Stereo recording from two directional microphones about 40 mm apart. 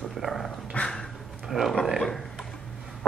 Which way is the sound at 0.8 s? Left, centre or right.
Left.